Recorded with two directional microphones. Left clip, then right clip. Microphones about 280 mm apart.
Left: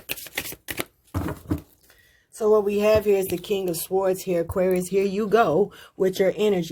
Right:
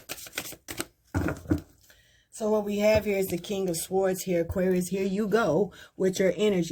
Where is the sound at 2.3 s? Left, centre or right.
Left.